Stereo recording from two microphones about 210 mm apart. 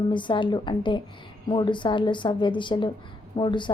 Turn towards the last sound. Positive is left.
turn(degrees=20)  # may be behind; listen again after turning